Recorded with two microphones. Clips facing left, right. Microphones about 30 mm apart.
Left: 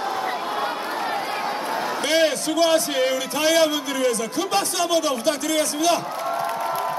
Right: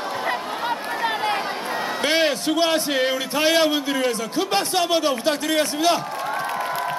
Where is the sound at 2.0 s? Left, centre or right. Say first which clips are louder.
Even; right.